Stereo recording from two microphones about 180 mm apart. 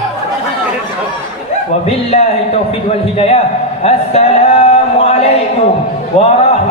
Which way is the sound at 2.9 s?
35° left (ahead or behind).